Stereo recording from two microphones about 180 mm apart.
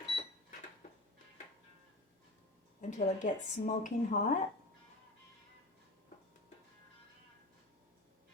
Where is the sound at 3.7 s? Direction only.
45° left (ahead or behind).